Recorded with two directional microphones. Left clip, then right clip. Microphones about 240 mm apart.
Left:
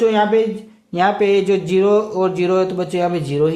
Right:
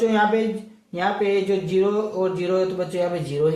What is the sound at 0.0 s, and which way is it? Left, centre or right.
Speech, left.